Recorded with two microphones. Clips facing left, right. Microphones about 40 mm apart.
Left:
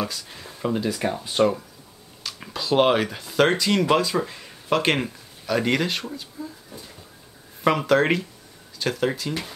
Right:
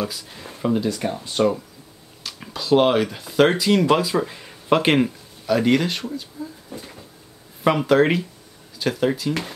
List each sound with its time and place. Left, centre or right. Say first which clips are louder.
0.6 s speech: right 4 dB; centre
0.8 s speech: right 1 dB; centre
4.6 s speech: right 3 dB; centre
4.9 s speech: right 7 dB; centre
6.7 s a sound: right 5 dB; right
7.6 s speech: right 2 dB; centre